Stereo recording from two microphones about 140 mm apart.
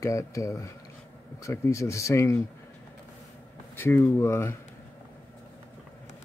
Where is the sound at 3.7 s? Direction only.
15° left (ahead or behind).